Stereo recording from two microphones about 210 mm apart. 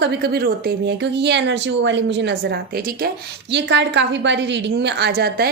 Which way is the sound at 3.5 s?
55° right (ahead or behind).